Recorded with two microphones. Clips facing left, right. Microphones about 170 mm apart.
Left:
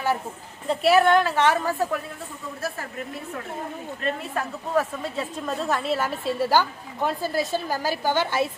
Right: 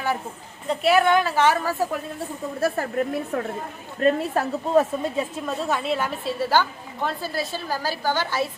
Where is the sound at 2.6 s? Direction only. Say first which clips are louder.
Right 10 dB; 60° right (ahead or behind).